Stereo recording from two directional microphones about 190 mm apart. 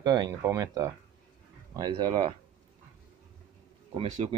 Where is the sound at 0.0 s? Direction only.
20° right (ahead or behind).